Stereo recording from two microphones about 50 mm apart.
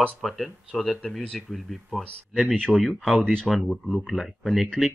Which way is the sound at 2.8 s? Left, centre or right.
Centre.